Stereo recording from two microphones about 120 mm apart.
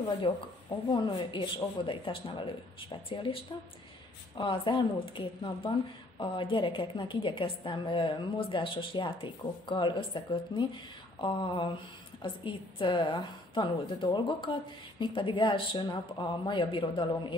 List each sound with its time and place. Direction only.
0.2 s a woman's voice: 45° left (ahead or behind)